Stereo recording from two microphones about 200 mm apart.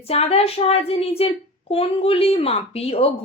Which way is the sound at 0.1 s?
30° left (ahead or behind).